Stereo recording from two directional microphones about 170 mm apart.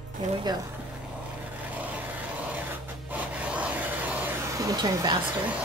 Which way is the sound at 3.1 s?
10° right (ahead or behind).